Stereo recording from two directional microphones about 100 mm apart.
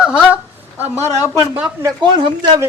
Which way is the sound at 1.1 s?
35° left (ahead or behind).